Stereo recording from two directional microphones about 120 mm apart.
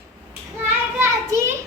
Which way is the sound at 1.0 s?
20° right (ahead or behind).